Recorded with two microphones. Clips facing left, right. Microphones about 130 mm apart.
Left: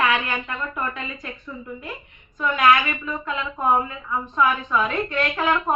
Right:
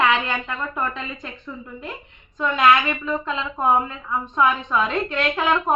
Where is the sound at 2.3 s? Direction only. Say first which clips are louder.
Right 1 dB; 25° right (ahead or behind).